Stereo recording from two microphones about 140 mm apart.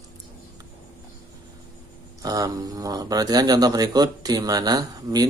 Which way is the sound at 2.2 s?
25° right (ahead or behind).